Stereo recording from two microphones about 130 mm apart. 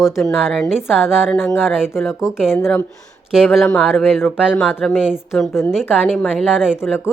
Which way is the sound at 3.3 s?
5° right (ahead or behind).